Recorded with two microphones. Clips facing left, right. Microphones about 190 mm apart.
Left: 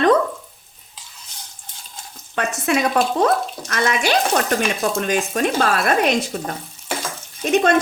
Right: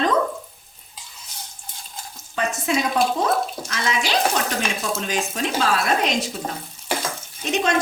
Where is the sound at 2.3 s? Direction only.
65° left (ahead or behind).